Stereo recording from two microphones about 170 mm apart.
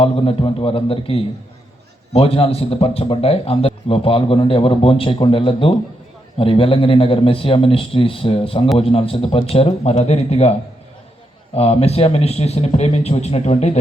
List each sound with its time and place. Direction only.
0.0 s a man's voice: 35° left (ahead or behind)
11.5 s a man's voice: 35° left (ahead or behind)